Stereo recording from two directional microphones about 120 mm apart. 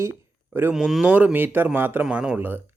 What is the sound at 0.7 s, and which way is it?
Speech, 5° right (ahead or behind).